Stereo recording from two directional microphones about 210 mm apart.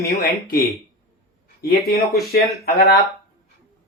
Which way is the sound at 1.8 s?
45° left (ahead or behind).